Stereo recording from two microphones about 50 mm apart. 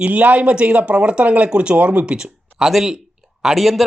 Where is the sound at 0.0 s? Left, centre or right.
Right.